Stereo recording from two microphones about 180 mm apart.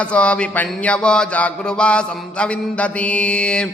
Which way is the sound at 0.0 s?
5° left (ahead or behind).